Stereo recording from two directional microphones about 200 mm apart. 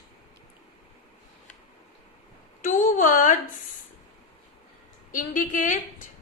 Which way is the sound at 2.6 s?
40° left (ahead or behind).